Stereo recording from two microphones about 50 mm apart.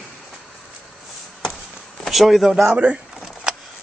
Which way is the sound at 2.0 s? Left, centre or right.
Centre.